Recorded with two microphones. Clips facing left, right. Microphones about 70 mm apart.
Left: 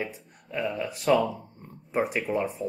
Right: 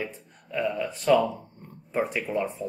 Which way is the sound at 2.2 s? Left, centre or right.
Centre.